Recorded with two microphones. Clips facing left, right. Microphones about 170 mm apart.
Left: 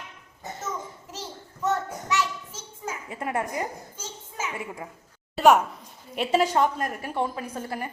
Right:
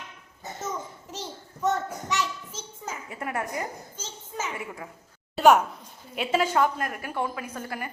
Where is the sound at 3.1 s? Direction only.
25° left (ahead or behind).